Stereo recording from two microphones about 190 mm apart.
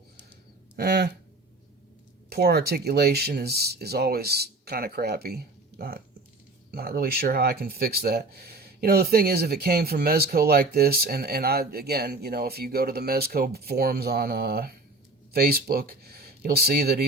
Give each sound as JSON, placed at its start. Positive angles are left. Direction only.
{"t": 0.8, "sound": "speech", "side_deg": -60}
{"t": 2.3, "sound": "speech", "side_deg": -55}